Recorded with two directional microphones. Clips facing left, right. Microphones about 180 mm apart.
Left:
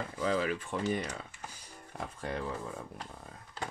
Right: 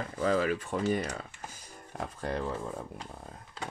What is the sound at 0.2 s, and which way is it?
Speech, 45° right (ahead or behind).